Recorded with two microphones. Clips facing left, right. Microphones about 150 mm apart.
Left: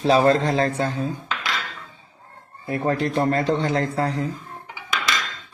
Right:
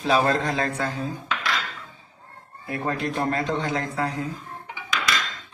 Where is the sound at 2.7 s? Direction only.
35° left (ahead or behind).